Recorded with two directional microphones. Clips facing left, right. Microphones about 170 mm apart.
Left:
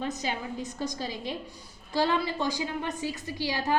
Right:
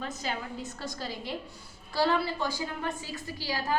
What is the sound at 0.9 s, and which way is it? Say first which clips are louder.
A woman's voice: left 2 dB; 15° left (ahead or behind).